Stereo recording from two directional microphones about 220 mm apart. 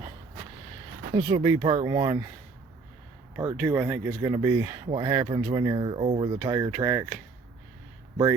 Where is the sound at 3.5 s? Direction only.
10° right (ahead or behind).